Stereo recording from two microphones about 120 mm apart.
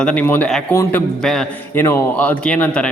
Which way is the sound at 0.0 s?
10° left (ahead or behind).